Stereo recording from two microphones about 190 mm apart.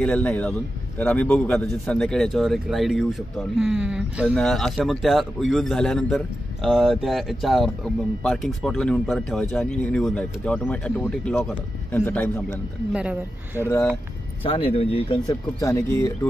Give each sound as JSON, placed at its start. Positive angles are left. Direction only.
{"t": 0.0, "sound": "a man's voice", "side_deg": 5}
{"t": 12.9, "sound": "speech", "side_deg": -5}
{"t": 14.4, "sound": "speech", "side_deg": 30}
{"t": 15.6, "sound": "speech", "side_deg": 15}